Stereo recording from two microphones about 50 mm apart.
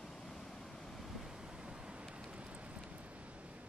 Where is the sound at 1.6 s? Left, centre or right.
Centre.